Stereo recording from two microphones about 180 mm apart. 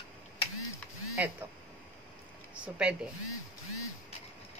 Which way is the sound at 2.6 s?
5° right (ahead or behind).